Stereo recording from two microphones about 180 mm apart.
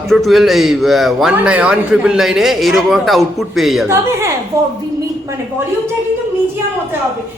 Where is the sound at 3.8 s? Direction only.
15° right (ahead or behind).